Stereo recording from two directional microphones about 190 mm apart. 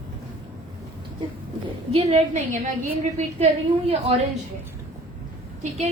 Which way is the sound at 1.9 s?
35° right (ahead or behind).